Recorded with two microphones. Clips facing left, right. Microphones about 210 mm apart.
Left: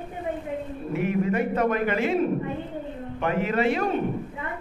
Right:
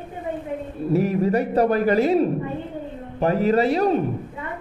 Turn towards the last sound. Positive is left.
turn(degrees=-35)  # may be behind; listen again after turning